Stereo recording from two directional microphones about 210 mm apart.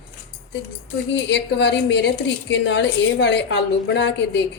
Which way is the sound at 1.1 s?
55° left (ahead or behind).